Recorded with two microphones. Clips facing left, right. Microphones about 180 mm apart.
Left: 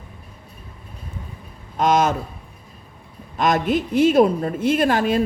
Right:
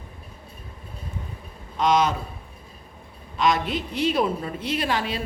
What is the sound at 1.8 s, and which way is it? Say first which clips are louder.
Speech: left 3 dB; 45° left (ahead or behind).